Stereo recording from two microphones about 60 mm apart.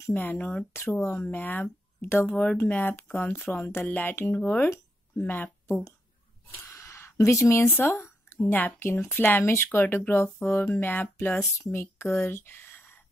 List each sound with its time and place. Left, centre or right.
0.1 s speech: left
2.2 s speech: left
6.7 s a sound: left
8.5 s speech: left